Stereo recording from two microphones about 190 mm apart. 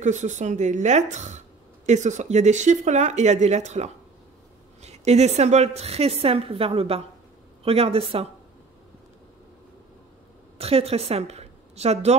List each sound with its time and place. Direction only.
0.0 s a woman's voice: 40° right (ahead or behind)
10.6 s a woman's voice: 30° right (ahead or behind)